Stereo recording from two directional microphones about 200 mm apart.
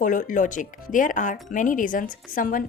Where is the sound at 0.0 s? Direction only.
40° left (ahead or behind).